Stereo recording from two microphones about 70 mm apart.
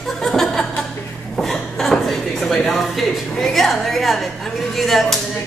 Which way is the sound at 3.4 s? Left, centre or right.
Centre.